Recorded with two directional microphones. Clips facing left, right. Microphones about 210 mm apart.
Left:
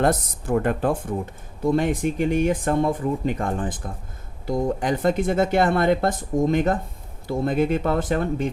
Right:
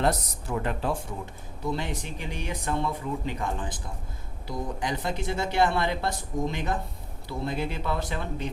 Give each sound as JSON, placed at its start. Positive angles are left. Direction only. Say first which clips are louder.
{"t": 0.0, "sound": "speech", "louder": "left 5 dB", "side_deg": 50}